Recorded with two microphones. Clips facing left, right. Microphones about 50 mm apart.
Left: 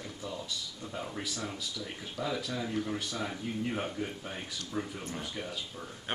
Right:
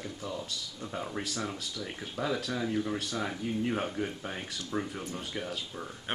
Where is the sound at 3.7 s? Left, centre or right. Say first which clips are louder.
Right 2 dB; centre.